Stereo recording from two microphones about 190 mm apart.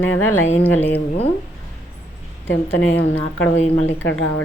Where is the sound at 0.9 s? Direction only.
30° left (ahead or behind).